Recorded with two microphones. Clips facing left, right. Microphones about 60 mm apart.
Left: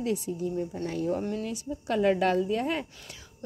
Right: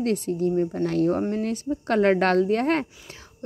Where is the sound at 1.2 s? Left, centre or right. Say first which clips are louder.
Right 6 dB; right.